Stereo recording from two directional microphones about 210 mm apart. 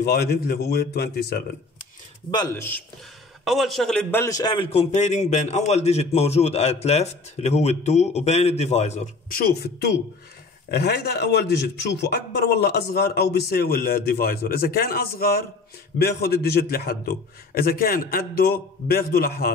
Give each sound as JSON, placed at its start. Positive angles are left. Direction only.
{"t": 0.0, "sound": "a man's voice", "side_deg": 50}
{"t": 2.3, "sound": "speech", "side_deg": 15}
{"t": 3.4, "sound": "a man's voice", "side_deg": 0}